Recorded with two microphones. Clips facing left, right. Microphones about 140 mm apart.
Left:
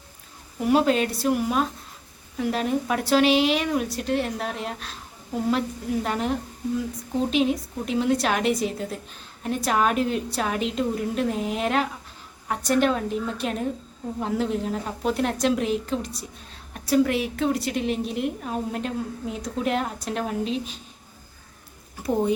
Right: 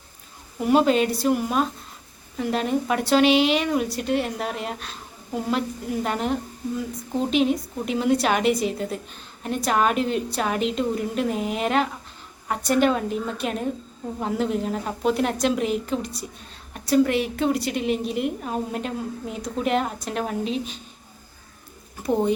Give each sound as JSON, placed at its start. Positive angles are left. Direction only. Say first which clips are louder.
{"t": 0.6, "sound": "a woman's voice", "louder": "right 2 dB", "side_deg": 0}